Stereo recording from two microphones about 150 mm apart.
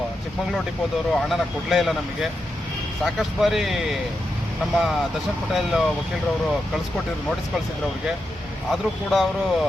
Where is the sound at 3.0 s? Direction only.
Centre (ahead or behind).